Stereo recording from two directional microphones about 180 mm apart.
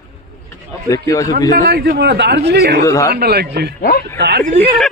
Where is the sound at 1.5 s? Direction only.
55° right (ahead or behind).